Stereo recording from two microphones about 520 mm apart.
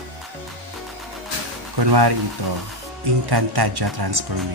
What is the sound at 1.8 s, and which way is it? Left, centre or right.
Speech, right.